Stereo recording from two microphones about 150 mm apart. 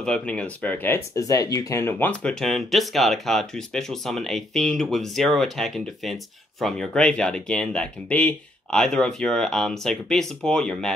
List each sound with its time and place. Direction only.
0.0 s speech: 5° left (ahead or behind)